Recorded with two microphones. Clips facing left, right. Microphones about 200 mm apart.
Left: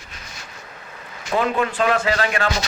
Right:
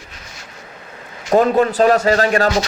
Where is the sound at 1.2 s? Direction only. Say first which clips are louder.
Right 8 dB; 40° right (ahead or behind).